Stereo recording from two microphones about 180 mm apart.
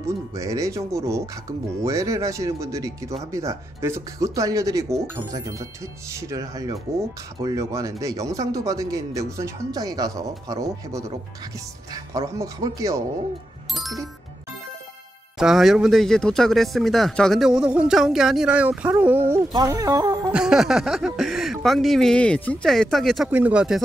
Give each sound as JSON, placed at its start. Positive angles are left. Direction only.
{"t": 0.0, "sound": "speech", "side_deg": -15}
{"t": 13.7, "sound": "music", "side_deg": 0}
{"t": 15.3, "sound": "speech", "side_deg": 0}
{"t": 20.3, "sound": "speech", "side_deg": -5}